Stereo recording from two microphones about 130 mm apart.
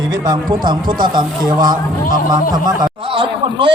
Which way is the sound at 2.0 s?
90° left.